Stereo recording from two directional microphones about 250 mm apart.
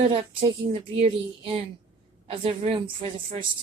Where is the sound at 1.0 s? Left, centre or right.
Right.